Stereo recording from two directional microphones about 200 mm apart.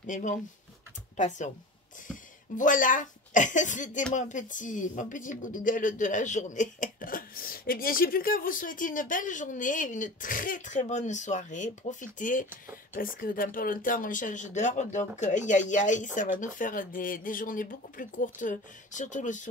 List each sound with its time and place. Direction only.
0.0 s speech: 40° left (ahead or behind)